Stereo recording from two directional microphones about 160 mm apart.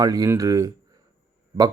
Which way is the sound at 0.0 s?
20° right (ahead or behind).